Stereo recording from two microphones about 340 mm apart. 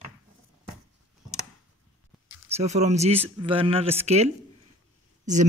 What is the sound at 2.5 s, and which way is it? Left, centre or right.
Speech, centre.